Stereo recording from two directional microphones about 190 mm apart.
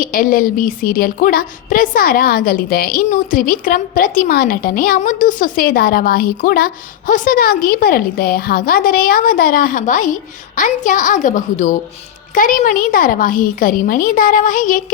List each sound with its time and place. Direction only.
0.0 s a woman's voice: 50° left (ahead or behind)